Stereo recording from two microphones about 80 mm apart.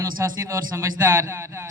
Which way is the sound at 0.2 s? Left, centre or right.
Right.